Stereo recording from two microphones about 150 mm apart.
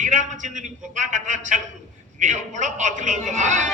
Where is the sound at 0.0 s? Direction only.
55° right (ahead or behind).